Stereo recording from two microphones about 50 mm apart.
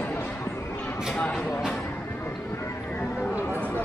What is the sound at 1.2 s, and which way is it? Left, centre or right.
Music, left.